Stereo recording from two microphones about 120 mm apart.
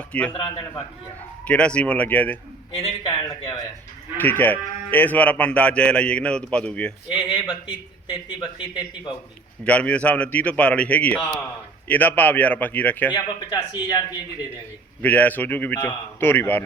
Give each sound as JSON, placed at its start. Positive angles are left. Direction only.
{"t": 0.1, "sound": "a man's voice", "side_deg": 10}
{"t": 0.3, "sound": "a man's voice", "side_deg": 45}
{"t": 1.5, "sound": "a man's voice", "side_deg": 10}
{"t": 2.8, "sound": "speech", "side_deg": 40}
{"t": 3.2, "sound": "speech", "side_deg": 30}
{"t": 4.2, "sound": "a man's voice", "side_deg": 15}
{"t": 7.1, "sound": "a man's voice", "side_deg": 45}
{"t": 9.6, "sound": "a man's voice", "side_deg": 10}
{"t": 13.1, "sound": "speech", "side_deg": 35}
{"t": 15.0, "sound": "a man's voice", "side_deg": 15}